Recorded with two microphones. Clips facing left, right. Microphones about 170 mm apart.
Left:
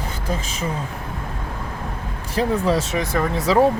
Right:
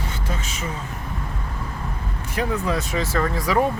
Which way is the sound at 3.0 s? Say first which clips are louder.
Left 2 dB; 15° left (ahead or behind).